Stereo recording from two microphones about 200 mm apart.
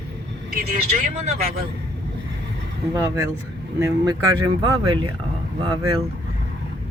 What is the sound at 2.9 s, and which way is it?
Speech, 15° right (ahead or behind).